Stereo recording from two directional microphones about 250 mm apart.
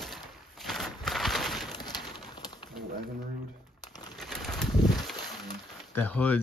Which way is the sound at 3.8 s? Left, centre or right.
Centre.